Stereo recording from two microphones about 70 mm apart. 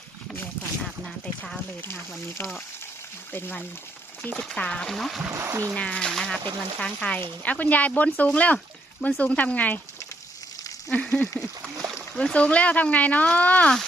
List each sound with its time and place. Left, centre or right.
3.3 s speech: left
4.4 s speech: centre
5.3 s speech: right
5.7 s speech: centre
10.9 s speech: centre